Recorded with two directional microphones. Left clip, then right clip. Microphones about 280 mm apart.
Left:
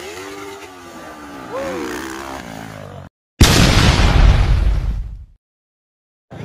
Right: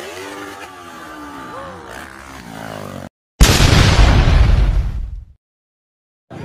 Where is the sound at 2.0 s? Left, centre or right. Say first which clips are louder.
Left 7 dB; left.